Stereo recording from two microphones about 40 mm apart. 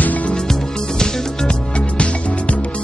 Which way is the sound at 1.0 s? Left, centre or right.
Centre.